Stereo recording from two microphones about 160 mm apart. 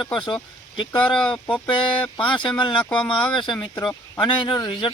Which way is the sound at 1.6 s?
30° left (ahead or behind).